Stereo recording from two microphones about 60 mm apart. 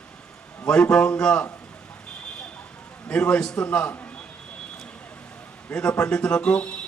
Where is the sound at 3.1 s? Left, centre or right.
Centre.